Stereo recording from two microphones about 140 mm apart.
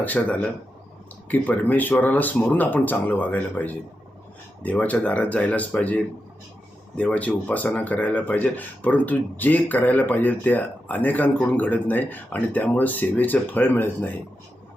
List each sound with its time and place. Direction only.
0.0 s a man's voice: 10° left (ahead or behind)